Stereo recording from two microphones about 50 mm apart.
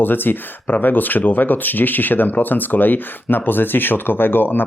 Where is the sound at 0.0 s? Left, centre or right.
Left.